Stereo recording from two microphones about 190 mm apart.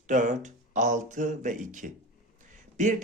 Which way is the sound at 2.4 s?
40° right (ahead or behind).